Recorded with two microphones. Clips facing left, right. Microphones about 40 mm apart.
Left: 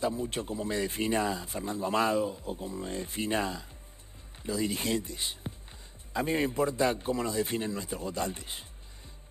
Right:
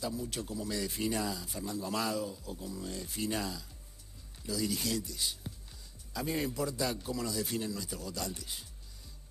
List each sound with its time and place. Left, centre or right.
0.0 s speech: left